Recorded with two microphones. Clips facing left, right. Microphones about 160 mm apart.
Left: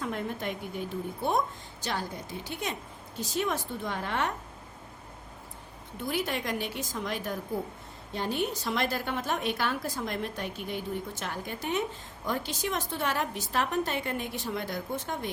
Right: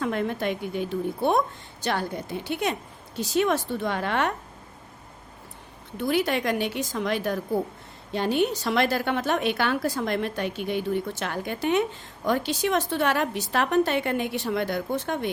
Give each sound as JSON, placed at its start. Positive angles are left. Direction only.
{"t": 0.0, "sound": "a woman's voice", "side_deg": -80}
{"t": 6.0, "sound": "a woman's voice", "side_deg": -75}